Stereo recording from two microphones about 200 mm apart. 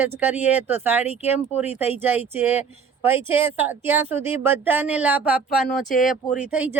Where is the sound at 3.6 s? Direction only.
10° right (ahead or behind).